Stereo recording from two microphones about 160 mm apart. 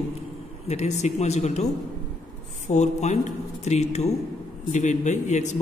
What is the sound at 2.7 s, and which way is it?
A man's voice, 50° left (ahead or behind).